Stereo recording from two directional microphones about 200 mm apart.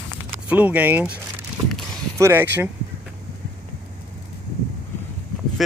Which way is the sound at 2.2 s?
10° right (ahead or behind).